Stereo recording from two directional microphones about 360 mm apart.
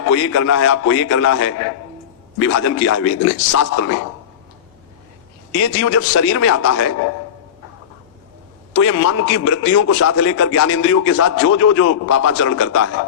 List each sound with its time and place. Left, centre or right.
0.1 s a man's voice: left
5.5 s a man's voice: left
8.7 s a man's voice: left